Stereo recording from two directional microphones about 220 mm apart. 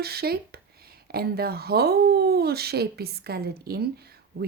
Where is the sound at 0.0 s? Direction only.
45° right (ahead or behind).